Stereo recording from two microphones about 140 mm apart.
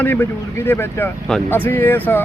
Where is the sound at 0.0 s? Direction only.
15° left (ahead or behind).